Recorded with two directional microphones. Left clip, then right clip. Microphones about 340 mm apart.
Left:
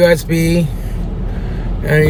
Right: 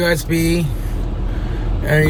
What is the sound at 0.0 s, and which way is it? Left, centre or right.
Speech, centre.